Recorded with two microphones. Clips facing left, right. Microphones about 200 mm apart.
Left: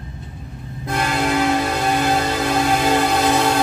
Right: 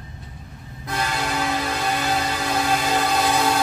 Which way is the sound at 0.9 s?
55° left (ahead or behind).